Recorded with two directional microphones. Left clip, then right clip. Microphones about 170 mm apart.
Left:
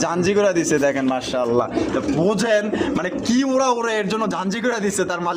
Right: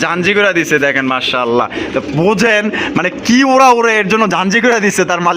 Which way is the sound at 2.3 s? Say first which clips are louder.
Right 9 dB; 45° right (ahead or behind).